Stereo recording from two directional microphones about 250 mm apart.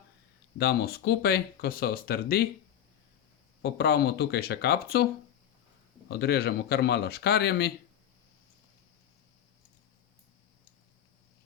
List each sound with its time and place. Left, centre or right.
0.6 s speech: left
3.6 s speech: left
6.1 s speech: left